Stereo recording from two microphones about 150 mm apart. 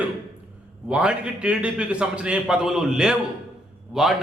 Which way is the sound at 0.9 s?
5° right (ahead or behind).